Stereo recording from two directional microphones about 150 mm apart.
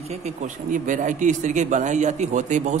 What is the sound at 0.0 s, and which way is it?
A man's voice, 45° right (ahead or behind).